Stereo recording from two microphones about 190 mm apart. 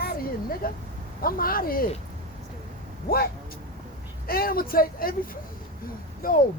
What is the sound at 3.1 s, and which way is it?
Speech, 50° left (ahead or behind).